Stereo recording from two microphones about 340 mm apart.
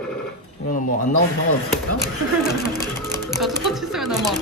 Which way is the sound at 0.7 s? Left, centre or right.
Left.